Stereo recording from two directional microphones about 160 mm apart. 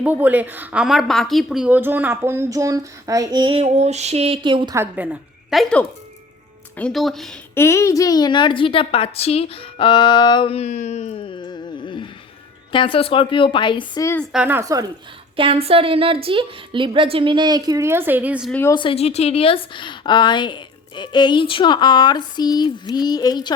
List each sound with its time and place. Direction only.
0.0 s a woman's voice: 10° right (ahead or behind); by 4.7 s 30° right (ahead or behind)
4.7 s a woman's voice: 15° right (ahead or behind)
7.5 s a woman's voice: 15° left (ahead or behind)
14.0 s speech: 15° left (ahead or behind)
14.3 s a woman's voice: 10° right (ahead or behind)
14.6 s speech: 20° right (ahead or behind)
15.4 s a woman's voice: 35° right (ahead or behind); by 18.5 s 5° right (ahead or behind)
18.7 s a woman's voice: 30° left (ahead or behind)